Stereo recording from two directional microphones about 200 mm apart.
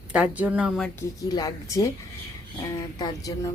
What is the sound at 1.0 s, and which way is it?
Speech, 20° left (ahead or behind).